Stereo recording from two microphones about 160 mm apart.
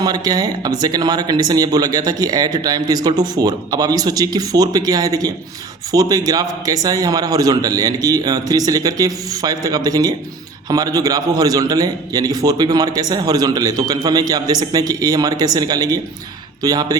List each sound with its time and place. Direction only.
0.0 s speech: 25° right (ahead or behind)